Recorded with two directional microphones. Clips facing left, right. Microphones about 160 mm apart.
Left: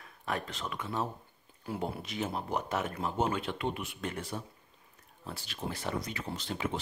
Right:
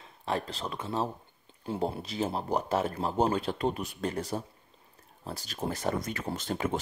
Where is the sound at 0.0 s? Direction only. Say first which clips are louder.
Right 4 dB; 30° right (ahead or behind).